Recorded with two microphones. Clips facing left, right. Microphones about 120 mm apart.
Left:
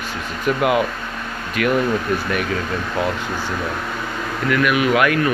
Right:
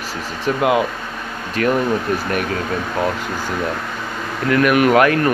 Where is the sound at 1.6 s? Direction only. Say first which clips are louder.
Right 2 dB; 35° right (ahead or behind).